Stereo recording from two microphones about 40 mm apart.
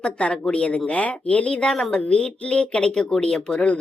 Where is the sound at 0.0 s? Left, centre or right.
Left.